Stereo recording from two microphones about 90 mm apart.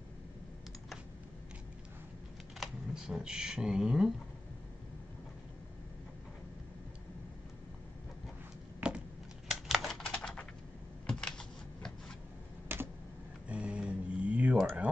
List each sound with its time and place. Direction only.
2.6 s speech: 5° right (ahead or behind)
8.8 s a sound: 10° right (ahead or behind)
10.0 s typing: 10° left (ahead or behind)
11.1 s computer keyboard: 10° left (ahead or behind)
12.6 s computer keyboard: 25° right (ahead or behind)
13.5 s a sound: 15° right (ahead or behind)